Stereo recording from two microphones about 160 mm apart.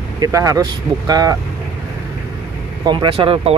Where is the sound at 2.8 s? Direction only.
30° right (ahead or behind).